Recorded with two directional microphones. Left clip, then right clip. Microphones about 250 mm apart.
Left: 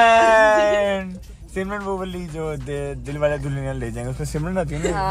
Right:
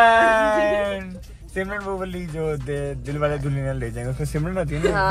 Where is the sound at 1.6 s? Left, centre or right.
Centre.